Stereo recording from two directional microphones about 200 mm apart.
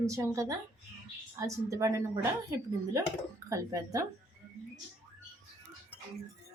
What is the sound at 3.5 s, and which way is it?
Speech, 15° right (ahead or behind).